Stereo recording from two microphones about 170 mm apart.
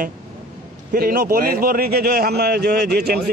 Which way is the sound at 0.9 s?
55° right (ahead or behind).